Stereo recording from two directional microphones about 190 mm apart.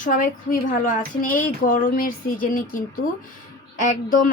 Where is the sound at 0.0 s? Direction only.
45° left (ahead or behind).